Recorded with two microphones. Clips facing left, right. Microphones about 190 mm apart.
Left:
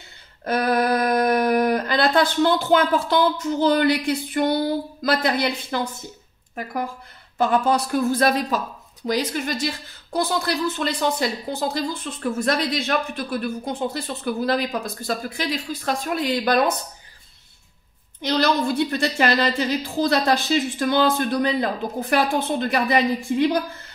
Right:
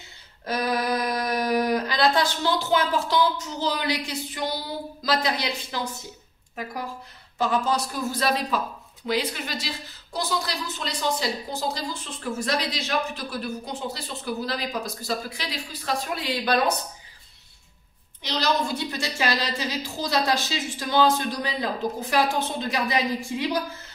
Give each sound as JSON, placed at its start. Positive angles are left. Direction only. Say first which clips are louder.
{"t": 0.5, "sound": "a woman's voice", "louder": "left 5 dB", "side_deg": 55}
{"t": 10.1, "sound": "a woman's voice", "louder": "left 6 dB", "side_deg": 55}
{"t": 18.2, "sound": "a woman's voice", "louder": "left 5 dB", "side_deg": 55}